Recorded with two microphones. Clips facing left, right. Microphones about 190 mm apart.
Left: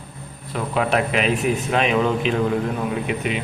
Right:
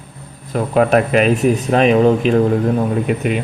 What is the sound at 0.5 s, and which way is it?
A man's voice, 45° right (ahead or behind).